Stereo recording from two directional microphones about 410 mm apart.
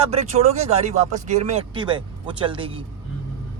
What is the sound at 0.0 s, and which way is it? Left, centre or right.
Speech, centre.